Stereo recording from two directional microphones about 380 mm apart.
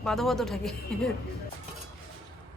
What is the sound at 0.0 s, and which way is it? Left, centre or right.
A woman's voice, centre.